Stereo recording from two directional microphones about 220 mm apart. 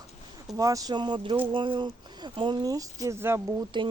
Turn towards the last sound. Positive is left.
turn(degrees=-20)  # may be behind; listen again after turning